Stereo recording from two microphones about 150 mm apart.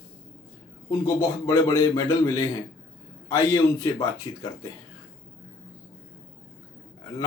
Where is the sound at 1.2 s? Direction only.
20° left (ahead or behind).